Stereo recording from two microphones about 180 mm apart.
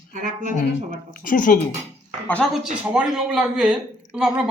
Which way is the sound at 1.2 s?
50° left (ahead or behind).